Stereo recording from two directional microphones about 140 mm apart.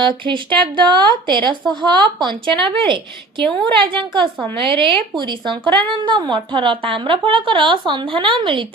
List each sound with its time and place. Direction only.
0.0 s speech: 35° right (ahead or behind)